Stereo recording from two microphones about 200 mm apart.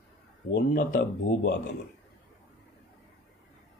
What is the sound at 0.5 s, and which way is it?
Speech, 55° left (ahead or behind).